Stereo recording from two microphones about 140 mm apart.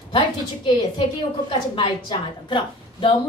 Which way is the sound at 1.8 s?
35° left (ahead or behind).